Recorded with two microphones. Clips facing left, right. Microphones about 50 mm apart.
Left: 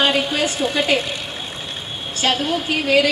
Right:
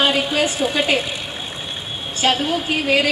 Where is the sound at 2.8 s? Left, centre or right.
Right.